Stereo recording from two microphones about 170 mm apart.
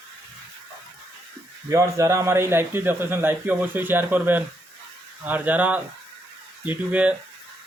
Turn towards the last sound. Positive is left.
turn(degrees=-10)  # may be behind; listen again after turning